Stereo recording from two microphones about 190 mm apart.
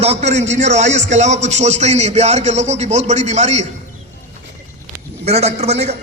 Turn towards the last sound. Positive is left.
turn(degrees=-35)  # may be behind; listen again after turning